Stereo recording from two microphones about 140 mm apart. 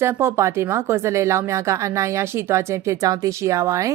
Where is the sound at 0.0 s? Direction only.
15° right (ahead or behind).